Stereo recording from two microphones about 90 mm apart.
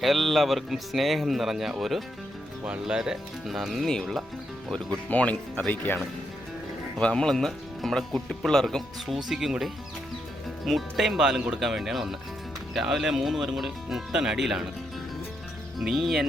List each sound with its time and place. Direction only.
0.0 s speech: centre (ahead or behind); by 6.0 s 20° left (ahead or behind)
7.0 s speech: 10° left (ahead or behind)
15.8 s speech: 5° right (ahead or behind)